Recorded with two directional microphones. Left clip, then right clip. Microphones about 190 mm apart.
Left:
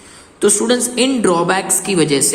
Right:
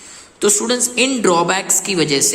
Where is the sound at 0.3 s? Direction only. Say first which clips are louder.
Left 2 dB; 10° right (ahead or behind).